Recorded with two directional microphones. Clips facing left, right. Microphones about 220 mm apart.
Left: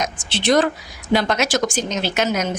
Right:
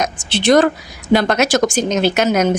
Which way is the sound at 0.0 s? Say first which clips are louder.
Right 5 dB; 65° right (ahead or behind).